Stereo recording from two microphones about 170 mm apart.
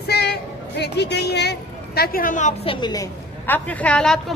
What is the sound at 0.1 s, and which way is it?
Music, 75° left (ahead or behind).